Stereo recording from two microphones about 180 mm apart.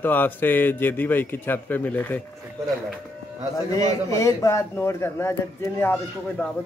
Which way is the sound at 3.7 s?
15° left (ahead or behind).